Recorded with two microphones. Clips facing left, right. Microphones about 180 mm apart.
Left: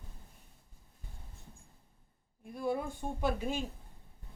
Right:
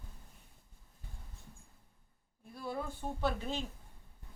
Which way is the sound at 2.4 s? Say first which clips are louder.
Left 7 dB; 15° left (ahead or behind).